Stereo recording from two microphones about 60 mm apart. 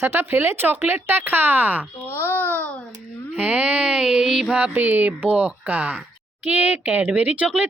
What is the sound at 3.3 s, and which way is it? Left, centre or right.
Speech, right.